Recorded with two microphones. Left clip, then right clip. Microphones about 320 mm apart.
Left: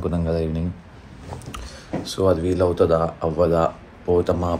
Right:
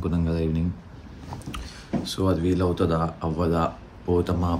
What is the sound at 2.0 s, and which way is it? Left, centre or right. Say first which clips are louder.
Speech: left 6 dB; centre.